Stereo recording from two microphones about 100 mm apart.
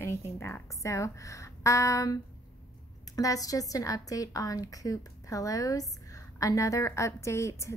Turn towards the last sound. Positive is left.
turn(degrees=30)  # may be behind; listen again after turning